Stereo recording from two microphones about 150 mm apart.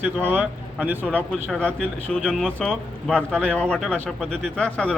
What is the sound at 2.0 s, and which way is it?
Speech, 5° left (ahead or behind).